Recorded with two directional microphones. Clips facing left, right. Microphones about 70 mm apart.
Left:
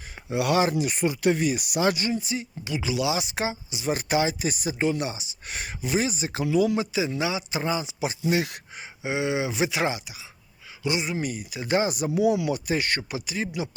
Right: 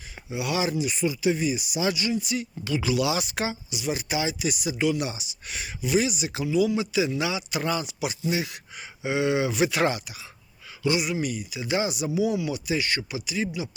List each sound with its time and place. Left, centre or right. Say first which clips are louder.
0.3 s speech: left 4 dB; left
3.9 s speech: left 6 dB; left
6.4 s speech: left 1 dB; left
6.9 s speech: right 1 dB; left
8.2 s speech: left 4 dB; left
9.0 s speech: right 2 dB; left
12.1 s speech: left 3 dB; left
12.5 s speech: left 1 dB; left